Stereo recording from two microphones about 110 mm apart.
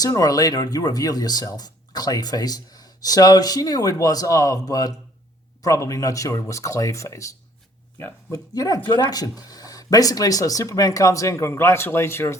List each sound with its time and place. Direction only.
0.0 s speech: 35° left (ahead or behind)